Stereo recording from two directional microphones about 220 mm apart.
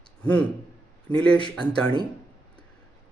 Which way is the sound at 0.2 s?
5° left (ahead or behind).